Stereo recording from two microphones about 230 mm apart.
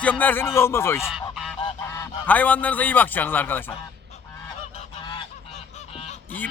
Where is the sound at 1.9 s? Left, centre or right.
Centre.